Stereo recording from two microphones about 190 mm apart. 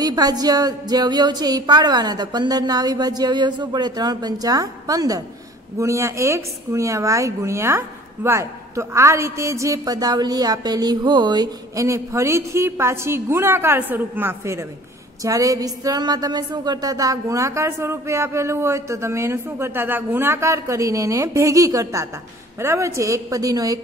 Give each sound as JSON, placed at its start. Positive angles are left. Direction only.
{"t": 0.0, "sound": "a woman's voice", "side_deg": -20}